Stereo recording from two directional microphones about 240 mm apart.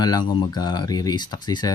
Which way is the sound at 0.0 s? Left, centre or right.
Centre.